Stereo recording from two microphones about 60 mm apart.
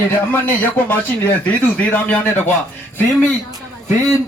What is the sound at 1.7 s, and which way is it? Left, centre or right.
Speech, left.